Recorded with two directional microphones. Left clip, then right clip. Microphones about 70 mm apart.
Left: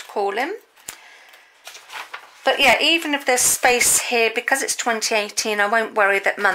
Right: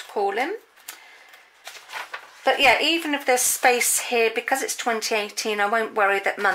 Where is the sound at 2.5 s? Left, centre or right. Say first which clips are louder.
Left 2 dB; left.